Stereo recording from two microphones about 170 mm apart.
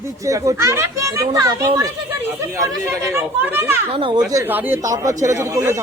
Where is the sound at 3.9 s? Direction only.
30° right (ahead or behind).